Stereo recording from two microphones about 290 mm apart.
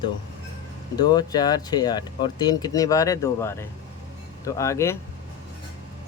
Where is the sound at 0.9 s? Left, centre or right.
Centre.